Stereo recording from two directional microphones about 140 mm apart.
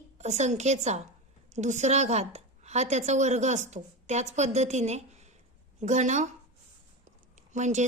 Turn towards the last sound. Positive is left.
turn(degrees=-60)  # may be behind; listen again after turning